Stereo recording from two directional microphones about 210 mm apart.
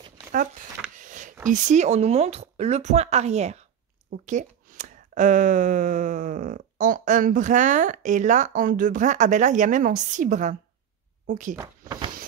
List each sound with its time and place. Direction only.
0.9 s speech: 35° right (ahead or behind)